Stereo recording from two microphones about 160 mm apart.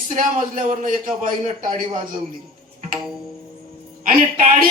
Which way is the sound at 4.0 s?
60° right (ahead or behind).